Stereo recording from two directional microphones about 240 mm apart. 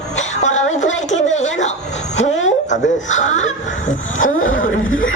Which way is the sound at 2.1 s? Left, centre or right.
Left.